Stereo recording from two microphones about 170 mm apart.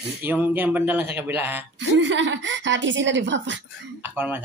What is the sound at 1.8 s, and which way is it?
A woman's voice, 90° right.